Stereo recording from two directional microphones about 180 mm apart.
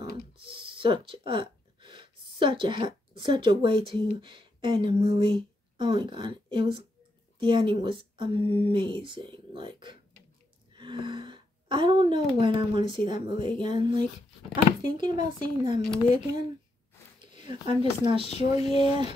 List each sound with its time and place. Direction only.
0.5 s speech: 25° right (ahead or behind)
17.2 s speech: 25° right (ahead or behind)
18.2 s a sound: 35° left (ahead or behind)
18.8 s speech: 30° right (ahead or behind)